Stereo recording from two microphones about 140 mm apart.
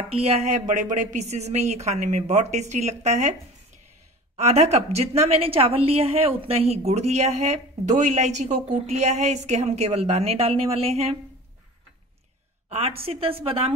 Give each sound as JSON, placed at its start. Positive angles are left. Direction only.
{"t": 0.1, "sound": "a woman's voice", "side_deg": -45}
{"t": 4.4, "sound": "a woman's voice", "side_deg": -50}
{"t": 12.6, "sound": "a sound", "side_deg": -45}
{"t": 13.1, "sound": "a woman's voice", "side_deg": -40}